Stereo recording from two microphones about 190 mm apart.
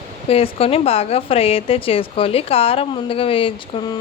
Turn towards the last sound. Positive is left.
turn(degrees=30)  # may be behind; listen again after turning